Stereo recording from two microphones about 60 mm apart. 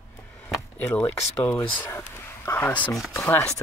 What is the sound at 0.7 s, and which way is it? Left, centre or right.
Speech, left.